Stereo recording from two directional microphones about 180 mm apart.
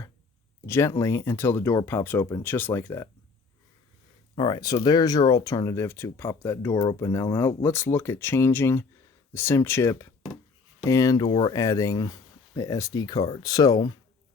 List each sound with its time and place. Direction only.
0.6 s speech: 15° left (ahead or behind)
4.4 s speech: 25° left (ahead or behind)
11.5 s speech: 20° left (ahead or behind)